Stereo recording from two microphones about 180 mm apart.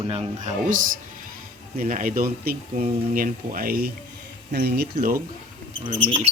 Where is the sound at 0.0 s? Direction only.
30° right (ahead or behind).